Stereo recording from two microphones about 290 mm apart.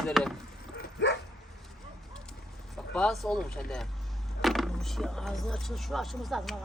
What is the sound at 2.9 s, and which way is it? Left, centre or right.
Speech, centre.